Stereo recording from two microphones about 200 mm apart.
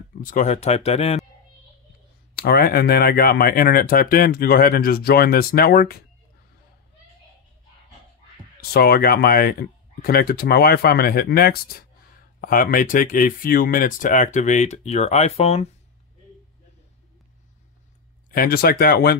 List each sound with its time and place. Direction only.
0.2 s speech: 40° left (ahead or behind)
2.3 s speech: 50° left (ahead or behind)
8.5 s speech: 50° left (ahead or behind); by 15.7 s 30° left (ahead or behind)
18.3 s speech: 45° left (ahead or behind)